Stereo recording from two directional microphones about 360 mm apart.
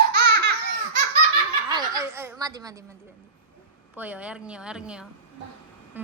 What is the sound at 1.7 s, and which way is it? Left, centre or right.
Snicker, centre.